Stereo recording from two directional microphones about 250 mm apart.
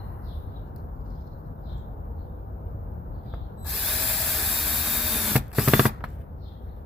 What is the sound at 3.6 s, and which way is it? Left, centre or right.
Tools, centre.